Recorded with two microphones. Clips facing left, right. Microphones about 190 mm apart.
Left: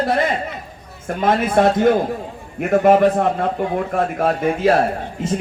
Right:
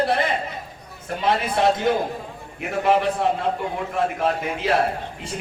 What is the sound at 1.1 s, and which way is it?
A man's voice, 50° left (ahead or behind).